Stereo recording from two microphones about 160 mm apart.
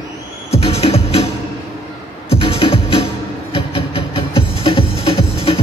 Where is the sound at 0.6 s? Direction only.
40° left (ahead or behind).